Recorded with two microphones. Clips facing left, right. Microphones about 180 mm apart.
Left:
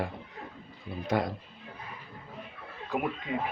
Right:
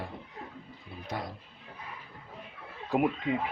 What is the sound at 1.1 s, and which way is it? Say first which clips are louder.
Speech: left 9 dB; 75° left (ahead or behind).